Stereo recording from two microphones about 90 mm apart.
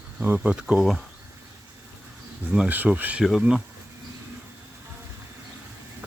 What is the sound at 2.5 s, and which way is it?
Speech, 15° right (ahead or behind).